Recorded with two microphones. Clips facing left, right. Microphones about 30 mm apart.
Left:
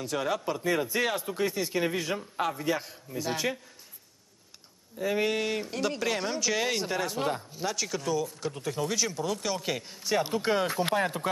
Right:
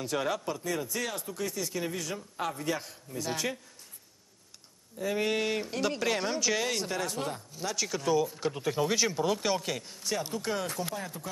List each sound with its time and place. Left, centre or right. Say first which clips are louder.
0.0 s speech: left 1 dB; centre
0.6 s speech: left 6 dB; left
2.4 s a man's voice: left 2 dB; centre
4.9 s a man's voice: left 3 dB; centre
5.3 s speech: even; centre
6.6 s a man's voice: left 2 dB; centre
7.7 s speech: even; centre
8.1 s speech: right 5 dB; centre
9.6 s a man's voice: left 2 dB; centre
10.1 s speech: left 6 dB; left
10.9 s speech: left 10 dB; left